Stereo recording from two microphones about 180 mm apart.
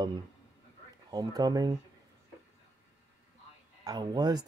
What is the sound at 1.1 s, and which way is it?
Speech, 20° right (ahead or behind).